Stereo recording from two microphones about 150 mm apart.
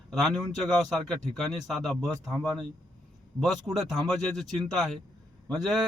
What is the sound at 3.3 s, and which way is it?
Speech, centre (ahead or behind).